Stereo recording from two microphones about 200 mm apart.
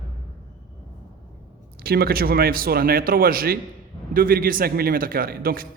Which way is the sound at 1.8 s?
50° right (ahead or behind).